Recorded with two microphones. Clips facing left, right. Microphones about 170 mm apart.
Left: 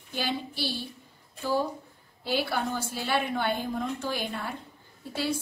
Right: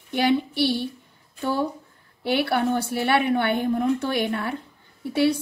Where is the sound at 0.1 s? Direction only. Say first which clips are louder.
Right 11 dB; 65° right (ahead or behind).